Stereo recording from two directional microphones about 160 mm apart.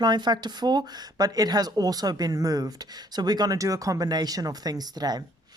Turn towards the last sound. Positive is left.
turn(degrees=-25)  # may be behind; listen again after turning